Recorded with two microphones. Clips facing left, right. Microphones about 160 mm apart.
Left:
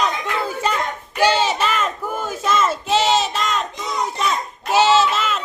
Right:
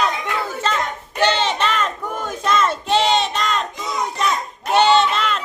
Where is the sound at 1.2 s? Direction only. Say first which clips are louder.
Left 1 dB; 5° left (ahead or behind).